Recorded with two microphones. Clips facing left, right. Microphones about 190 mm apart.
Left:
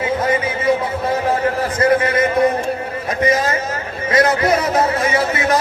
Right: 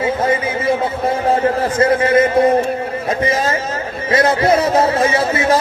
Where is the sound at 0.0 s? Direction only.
30° right (ahead or behind).